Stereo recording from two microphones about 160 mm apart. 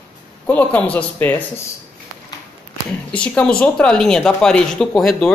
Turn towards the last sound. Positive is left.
turn(degrees=0)  # may be behind; listen again after turning